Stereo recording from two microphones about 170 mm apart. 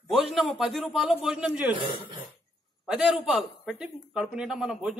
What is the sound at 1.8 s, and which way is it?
Speech, 30° right (ahead or behind).